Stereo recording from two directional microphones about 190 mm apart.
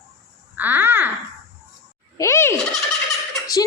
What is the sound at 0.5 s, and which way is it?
Babbling, 10° right (ahead or behind).